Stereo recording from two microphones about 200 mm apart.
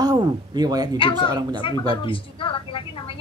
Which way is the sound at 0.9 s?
25° left (ahead or behind).